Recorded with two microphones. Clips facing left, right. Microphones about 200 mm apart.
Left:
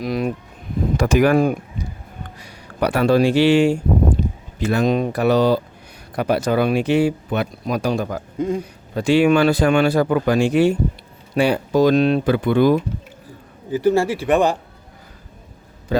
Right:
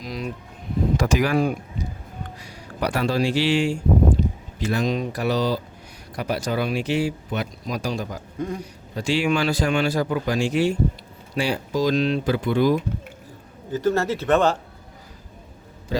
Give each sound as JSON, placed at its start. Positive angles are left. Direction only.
{"t": 0.0, "sound": "a sound", "side_deg": 60}
{"t": 0.9, "sound": "speech", "side_deg": 55}
{"t": 8.4, "sound": "a man's voice", "side_deg": 20}
{"t": 9.0, "sound": "speech", "side_deg": 60}
{"t": 13.7, "sound": "speech", "side_deg": 10}